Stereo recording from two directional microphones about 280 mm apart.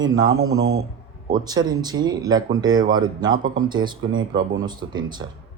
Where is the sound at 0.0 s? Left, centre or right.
Centre.